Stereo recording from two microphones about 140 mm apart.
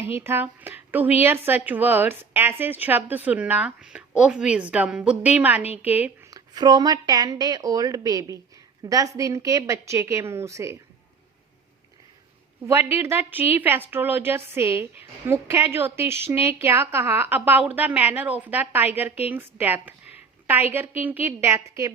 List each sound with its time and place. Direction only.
0.0 s a woman's voice: 15° right (ahead or behind)
6.3 s a woman's voice: 30° right (ahead or behind)
12.6 s a woman's voice: 15° right (ahead or behind)